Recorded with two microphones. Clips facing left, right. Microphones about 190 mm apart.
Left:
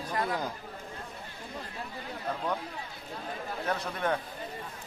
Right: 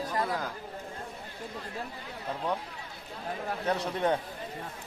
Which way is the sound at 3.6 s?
20° right (ahead or behind).